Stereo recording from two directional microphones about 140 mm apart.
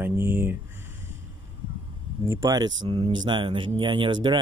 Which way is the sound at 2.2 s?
25° right (ahead or behind).